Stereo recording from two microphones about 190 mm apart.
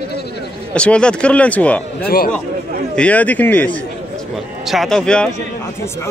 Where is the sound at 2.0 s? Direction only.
50° left (ahead or behind).